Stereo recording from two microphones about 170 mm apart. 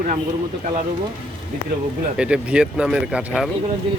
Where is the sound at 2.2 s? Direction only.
5° right (ahead or behind).